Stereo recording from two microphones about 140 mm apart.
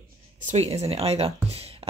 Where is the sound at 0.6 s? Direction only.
45° right (ahead or behind).